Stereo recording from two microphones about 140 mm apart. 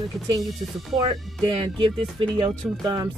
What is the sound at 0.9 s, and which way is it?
Speech, 35° right (ahead or behind).